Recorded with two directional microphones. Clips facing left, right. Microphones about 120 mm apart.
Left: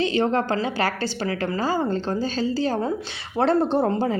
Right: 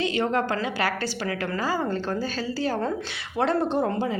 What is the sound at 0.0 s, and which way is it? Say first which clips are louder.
A woman's voice: left 3 dB; 30° left (ahead or behind).